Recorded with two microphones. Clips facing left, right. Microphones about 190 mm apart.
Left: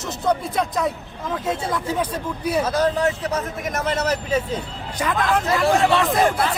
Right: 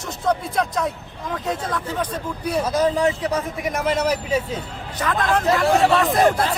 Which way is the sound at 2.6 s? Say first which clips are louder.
Right 3 dB; 10° right (ahead or behind).